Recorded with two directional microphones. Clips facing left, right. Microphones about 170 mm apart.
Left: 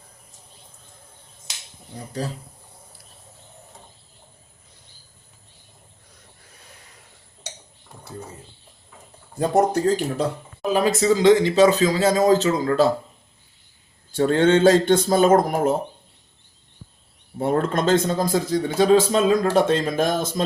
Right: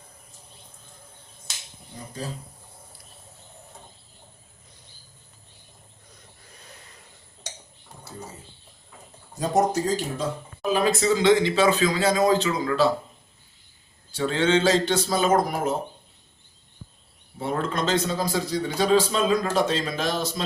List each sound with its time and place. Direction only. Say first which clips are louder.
9.4 s speech: left 4 dB; 55° left (ahead or behind)
10.7 s speech: left 3 dB; 40° left (ahead or behind)
14.1 s a man's voice: left 5 dB; 50° left (ahead or behind)
17.4 s a man's voice: left 6 dB; 50° left (ahead or behind)